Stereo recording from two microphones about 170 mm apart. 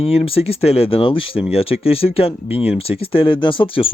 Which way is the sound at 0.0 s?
35° left (ahead or behind).